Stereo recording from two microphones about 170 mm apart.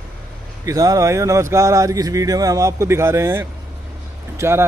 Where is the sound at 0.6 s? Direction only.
20° right (ahead or behind).